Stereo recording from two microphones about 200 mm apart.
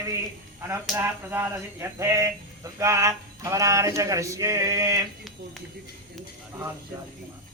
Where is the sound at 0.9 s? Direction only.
10° right (ahead or behind).